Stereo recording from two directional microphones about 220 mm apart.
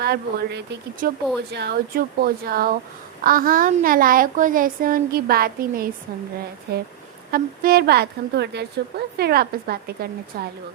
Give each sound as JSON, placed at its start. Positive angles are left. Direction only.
{"t": 0.0, "sound": "a woman's voice", "side_deg": -45}